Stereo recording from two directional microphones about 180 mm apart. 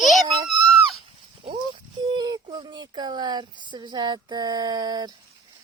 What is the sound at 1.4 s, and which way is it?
Speech, 30° right (ahead or behind).